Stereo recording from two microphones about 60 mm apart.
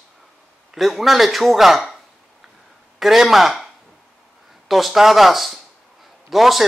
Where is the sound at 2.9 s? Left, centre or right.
Centre.